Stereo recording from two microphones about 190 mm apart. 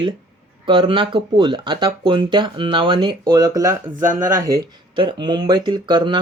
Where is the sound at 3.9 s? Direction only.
45° right (ahead or behind).